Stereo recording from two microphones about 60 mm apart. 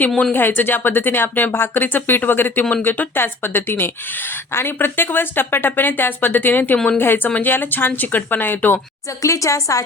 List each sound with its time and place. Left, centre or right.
0.3 s a woman's voice: left
9.2 s speech: left